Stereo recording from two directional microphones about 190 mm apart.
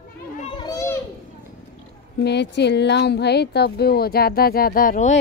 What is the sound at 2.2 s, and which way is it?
Speech, 65° left (ahead or behind).